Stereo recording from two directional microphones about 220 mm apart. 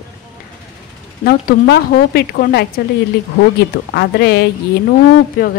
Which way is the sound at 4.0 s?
50° left (ahead or behind).